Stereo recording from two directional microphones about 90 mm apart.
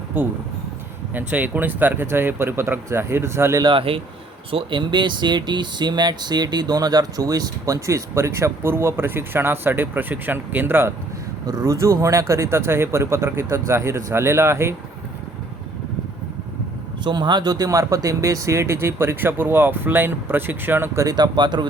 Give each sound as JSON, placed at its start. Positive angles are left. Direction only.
{"t": 0.1, "sound": "speech", "side_deg": -20}
{"t": 3.6, "sound": "speech", "side_deg": -70}
{"t": 4.5, "sound": "speech", "side_deg": -60}
{"t": 11.4, "sound": "speech", "side_deg": -40}
{"t": 17.0, "sound": "speech", "side_deg": -55}
{"t": 21.1, "sound": "speech", "side_deg": -55}